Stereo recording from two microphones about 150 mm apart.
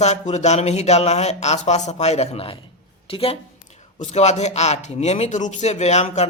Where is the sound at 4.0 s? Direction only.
50° left (ahead or behind).